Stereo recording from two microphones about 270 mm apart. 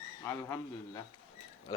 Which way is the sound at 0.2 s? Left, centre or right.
Centre.